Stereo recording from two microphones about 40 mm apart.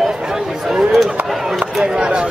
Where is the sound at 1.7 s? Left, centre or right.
Centre.